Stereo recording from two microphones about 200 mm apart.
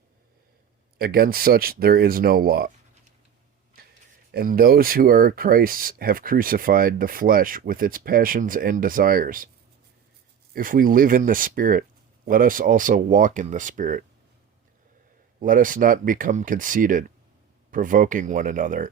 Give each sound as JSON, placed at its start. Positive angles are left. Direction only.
{"t": 0.9, "sound": "speech", "side_deg": -50}
{"t": 4.3, "sound": "speech", "side_deg": -45}
{"t": 10.5, "sound": "speech", "side_deg": -45}
{"t": 15.4, "sound": "speech", "side_deg": -45}